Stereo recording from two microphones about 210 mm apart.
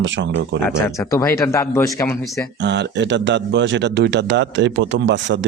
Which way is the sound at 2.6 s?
55° right (ahead or behind).